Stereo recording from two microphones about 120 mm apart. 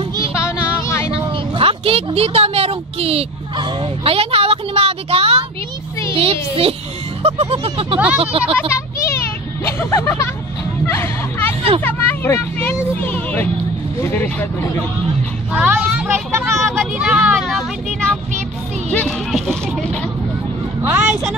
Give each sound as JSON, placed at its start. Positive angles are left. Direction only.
{"t": 0.3, "sound": "a sound", "side_deg": 25}
{"t": 1.6, "sound": "speech", "side_deg": -50}
{"t": 9.7, "sound": "speech", "side_deg": 20}
{"t": 10.9, "sound": "music", "side_deg": 20}
{"t": 11.8, "sound": "speech", "side_deg": 15}
{"t": 15.5, "sound": "speech", "side_deg": -10}
{"t": 16.5, "sound": "speech", "side_deg": 0}
{"t": 18.9, "sound": "a sound", "side_deg": 5}
{"t": 20.8, "sound": "vehicle", "side_deg": -20}